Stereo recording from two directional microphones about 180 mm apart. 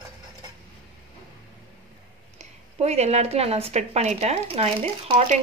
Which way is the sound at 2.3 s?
35° right (ahead or behind).